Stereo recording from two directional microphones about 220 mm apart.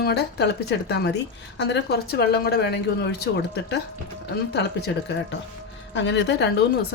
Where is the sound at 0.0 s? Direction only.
50° left (ahead or behind).